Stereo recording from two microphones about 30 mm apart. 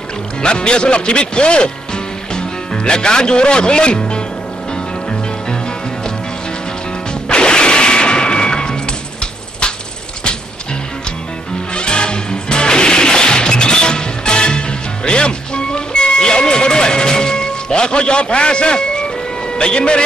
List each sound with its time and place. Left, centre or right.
0.4 s speech: left
7.2 s music: left
11.7 s music: left
19.6 s speech: left